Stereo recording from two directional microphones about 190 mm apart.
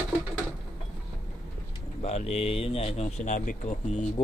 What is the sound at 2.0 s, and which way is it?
Speech, 35° left (ahead or behind).